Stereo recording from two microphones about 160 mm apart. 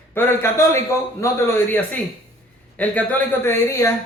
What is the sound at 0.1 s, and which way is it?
A man's voice, 15° left (ahead or behind).